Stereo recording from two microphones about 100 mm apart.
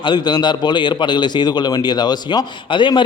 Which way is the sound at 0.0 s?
50° left (ahead or behind).